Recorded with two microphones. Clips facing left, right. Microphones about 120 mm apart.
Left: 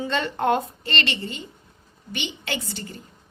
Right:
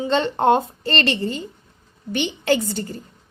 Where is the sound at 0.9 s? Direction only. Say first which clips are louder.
Right 6 dB; 40° right (ahead or behind).